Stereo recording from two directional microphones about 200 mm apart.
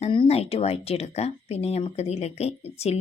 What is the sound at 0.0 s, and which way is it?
Speech, 30° left (ahead or behind).